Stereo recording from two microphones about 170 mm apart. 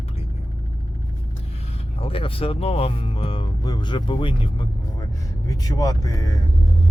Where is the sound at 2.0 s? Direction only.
30° left (ahead or behind).